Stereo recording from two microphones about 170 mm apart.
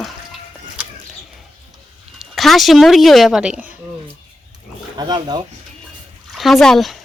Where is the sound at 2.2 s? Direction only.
Centre (ahead or behind).